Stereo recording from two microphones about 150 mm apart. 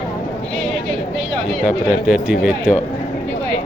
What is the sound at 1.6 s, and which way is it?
Speech, 5° right (ahead or behind).